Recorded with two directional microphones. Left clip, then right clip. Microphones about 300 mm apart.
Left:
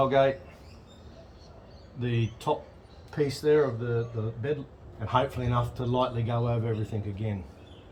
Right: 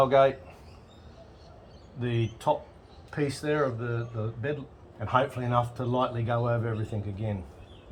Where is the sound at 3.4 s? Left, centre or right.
Centre.